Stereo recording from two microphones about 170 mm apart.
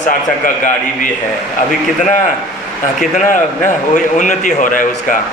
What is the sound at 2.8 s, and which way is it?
A man's voice, 50° left (ahead or behind).